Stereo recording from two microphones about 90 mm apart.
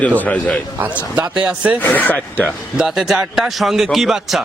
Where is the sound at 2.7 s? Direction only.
5° right (ahead or behind).